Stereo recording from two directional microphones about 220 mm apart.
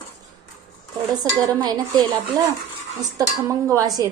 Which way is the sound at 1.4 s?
15° right (ahead or behind).